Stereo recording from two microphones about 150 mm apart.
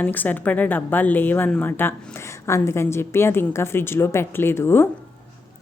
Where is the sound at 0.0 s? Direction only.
10° left (ahead or behind).